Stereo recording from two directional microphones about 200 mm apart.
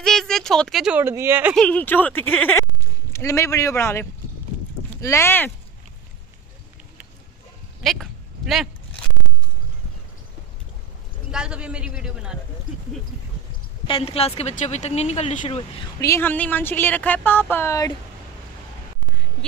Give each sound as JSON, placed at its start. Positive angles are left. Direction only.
{"t": 0.0, "sound": "speech", "side_deg": 0}
{"t": 1.6, "sound": "speech", "side_deg": 5}
{"t": 7.8, "sound": "a sound", "side_deg": 0}
{"t": 11.3, "sound": "a man's voice", "side_deg": -5}
{"t": 13.8, "sound": "a woman's voice", "side_deg": 25}
{"t": 16.0, "sound": "speech", "side_deg": 10}